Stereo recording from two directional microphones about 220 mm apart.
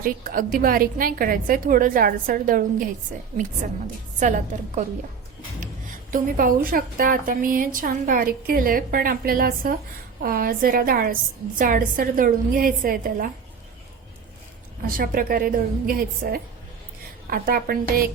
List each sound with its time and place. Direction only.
0.0 s a woman's voice: 40° right (ahead or behind)
6.1 s a woman's voice: 40° right (ahead or behind)
14.8 s a woman's voice: 40° right (ahead or behind)